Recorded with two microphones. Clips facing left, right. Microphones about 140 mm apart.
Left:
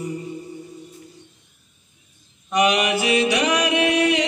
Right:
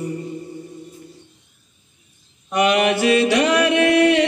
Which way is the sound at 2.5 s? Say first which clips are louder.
Right 2 dB; 55° right (ahead or behind).